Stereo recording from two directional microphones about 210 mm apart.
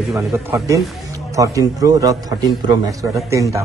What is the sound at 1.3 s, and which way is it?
A man's voice, 15° right (ahead or behind).